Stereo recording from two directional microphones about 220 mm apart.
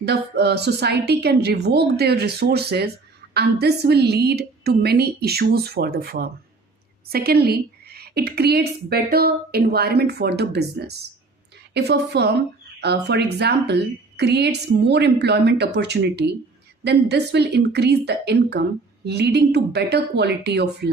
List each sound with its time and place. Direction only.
0.0 s a woman's voice: 50° right (ahead or behind)